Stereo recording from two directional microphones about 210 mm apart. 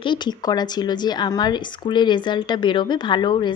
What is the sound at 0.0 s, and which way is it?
A woman's voice, 20° left (ahead or behind).